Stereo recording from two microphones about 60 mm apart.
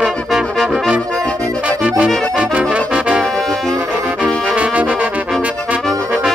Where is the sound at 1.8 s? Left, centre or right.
Right.